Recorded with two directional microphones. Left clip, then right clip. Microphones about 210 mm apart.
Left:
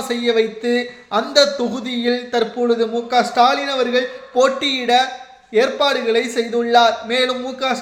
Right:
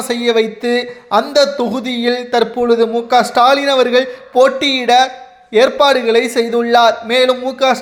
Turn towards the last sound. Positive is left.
turn(degrees=-35)  # may be behind; listen again after turning